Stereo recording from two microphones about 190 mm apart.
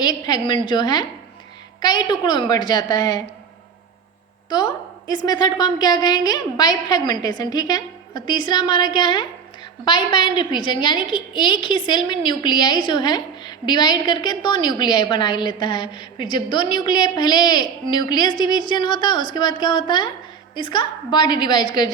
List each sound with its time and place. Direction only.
0.0 s a woman's voice: 20° left (ahead or behind)
4.4 s a woman's voice: 25° left (ahead or behind)